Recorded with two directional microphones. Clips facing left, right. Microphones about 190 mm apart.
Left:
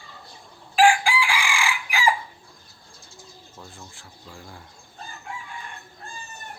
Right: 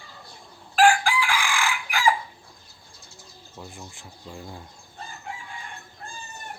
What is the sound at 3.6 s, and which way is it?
Speech, 15° right (ahead or behind).